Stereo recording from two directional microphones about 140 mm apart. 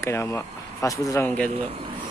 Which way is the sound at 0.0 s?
20° left (ahead or behind).